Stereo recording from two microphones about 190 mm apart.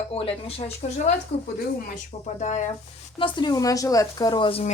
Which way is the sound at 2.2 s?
40° left (ahead or behind).